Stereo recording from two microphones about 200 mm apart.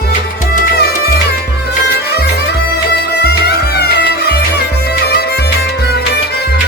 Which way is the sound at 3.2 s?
55° left (ahead or behind).